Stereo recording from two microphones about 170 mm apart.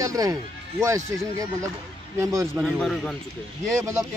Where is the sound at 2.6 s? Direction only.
Centre (ahead or behind).